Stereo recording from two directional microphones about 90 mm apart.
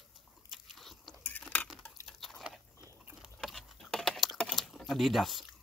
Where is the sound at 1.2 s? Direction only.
20° left (ahead or behind).